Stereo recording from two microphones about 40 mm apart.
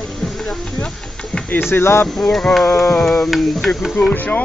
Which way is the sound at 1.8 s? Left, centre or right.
Left.